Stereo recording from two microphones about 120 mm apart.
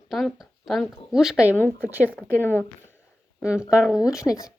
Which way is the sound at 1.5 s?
15° left (ahead or behind).